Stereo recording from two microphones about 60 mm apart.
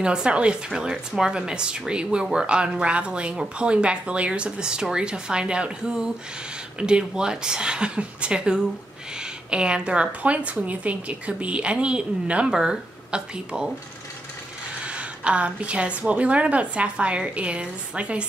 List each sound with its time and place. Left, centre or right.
0.0 s a woman's voice: centre
14.9 s a woman's voice: centre